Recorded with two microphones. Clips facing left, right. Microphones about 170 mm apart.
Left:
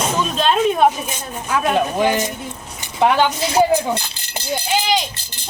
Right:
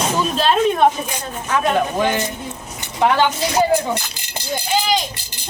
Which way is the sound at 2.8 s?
15° left (ahead or behind).